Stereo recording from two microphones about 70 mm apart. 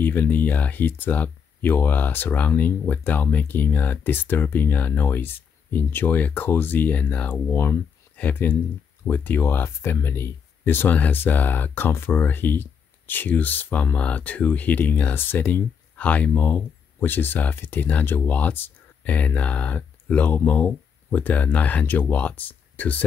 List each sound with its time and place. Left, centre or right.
0.0 s speech: left
7.4 s speech: left
8.2 s speech: left